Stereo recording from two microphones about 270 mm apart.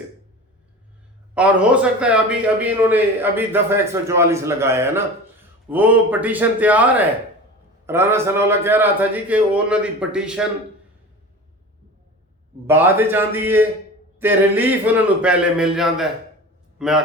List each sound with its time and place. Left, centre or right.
1.4 s a man's voice: centre
12.6 s a man's voice: centre